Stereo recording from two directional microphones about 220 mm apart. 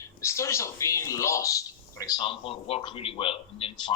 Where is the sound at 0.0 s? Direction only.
15° left (ahead or behind).